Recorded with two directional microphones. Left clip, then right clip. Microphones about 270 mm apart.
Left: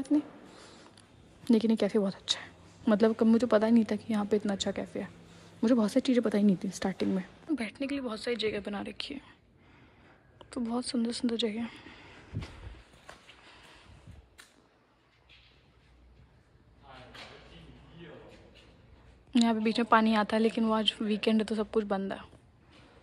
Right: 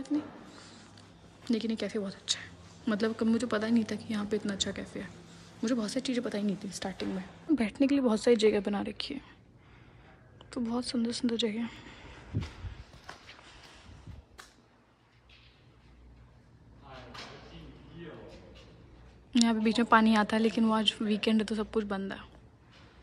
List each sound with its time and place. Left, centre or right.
0.0 s a woman's voice: centre
7.4 s a woman's voice: centre
10.4 s a woman's voice: centre
19.3 s a woman's voice: centre